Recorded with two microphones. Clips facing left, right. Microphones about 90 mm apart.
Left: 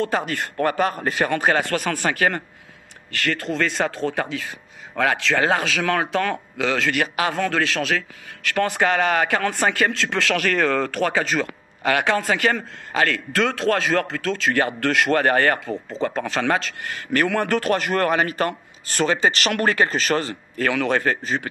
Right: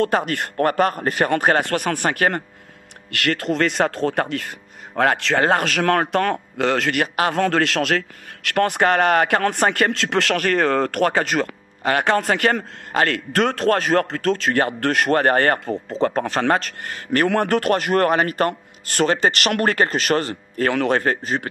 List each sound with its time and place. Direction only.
0.1 s speech: 55° right (ahead or behind)
3.1 s speech: 65° right (ahead or behind); by 7.3 s 50° right (ahead or behind)
7.3 s a man's voice: 70° right (ahead or behind)
8.5 s speech: 55° right (ahead or behind)
10.3 s speech: 45° right (ahead or behind)
10.9 s speech: 50° right (ahead or behind)
11.8 s speech: 40° right (ahead or behind)
12.2 s speech: 55° right (ahead or behind)
15.9 s speech: 65° right (ahead or behind)
16.2 s speech: 45° right (ahead or behind)